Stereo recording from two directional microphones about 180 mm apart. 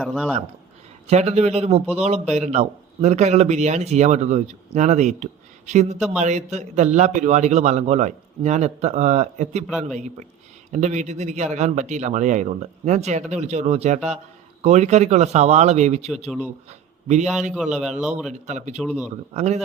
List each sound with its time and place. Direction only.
0.0 s speech: 5° left (ahead or behind)
1.0 s a man's voice: 35° right (ahead or behind)
18.4 s a man's voice: 40° right (ahead or behind)